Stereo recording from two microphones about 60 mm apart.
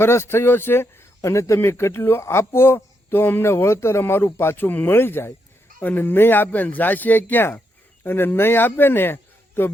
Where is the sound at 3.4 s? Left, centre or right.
Left.